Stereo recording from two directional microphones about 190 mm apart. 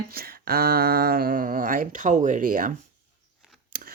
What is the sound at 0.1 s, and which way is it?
Speech, 50° right (ahead or behind).